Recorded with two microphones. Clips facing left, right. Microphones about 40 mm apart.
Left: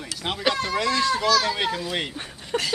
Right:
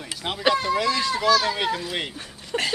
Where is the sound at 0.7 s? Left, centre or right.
Centre.